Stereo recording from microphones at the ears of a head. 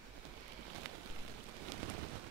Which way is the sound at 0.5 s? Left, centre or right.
Right.